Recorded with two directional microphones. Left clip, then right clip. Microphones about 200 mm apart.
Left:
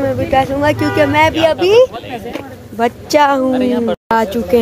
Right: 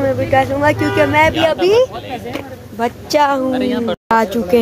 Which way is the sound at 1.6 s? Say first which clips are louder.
Left 3 dB; 40° left (ahead or behind).